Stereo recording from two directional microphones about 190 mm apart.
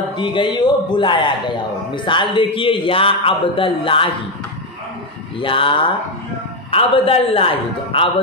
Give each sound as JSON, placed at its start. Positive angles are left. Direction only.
{"t": 0.2, "sound": "speech", "side_deg": 25}
{"t": 5.4, "sound": "speech", "side_deg": 25}